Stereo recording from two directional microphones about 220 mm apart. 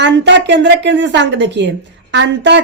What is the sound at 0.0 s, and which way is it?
Speech, 55° right (ahead or behind).